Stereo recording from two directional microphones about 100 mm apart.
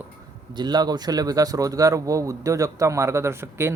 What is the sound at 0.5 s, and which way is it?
Speech, 45° right (ahead or behind).